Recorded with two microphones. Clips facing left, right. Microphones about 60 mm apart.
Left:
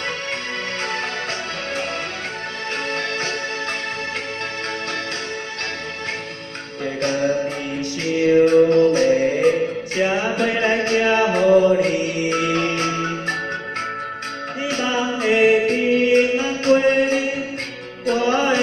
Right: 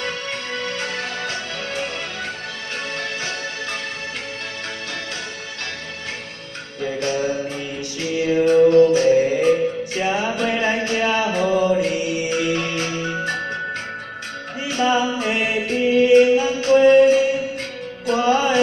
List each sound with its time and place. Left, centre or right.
6.8 s music: left
14.6 s music: left